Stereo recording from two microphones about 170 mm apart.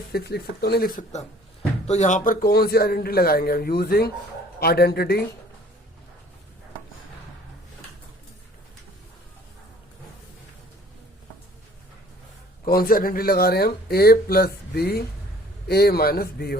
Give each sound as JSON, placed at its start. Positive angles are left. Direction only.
{"t": 0.1, "sound": "speech", "side_deg": 65}
{"t": 12.6, "sound": "speech", "side_deg": 60}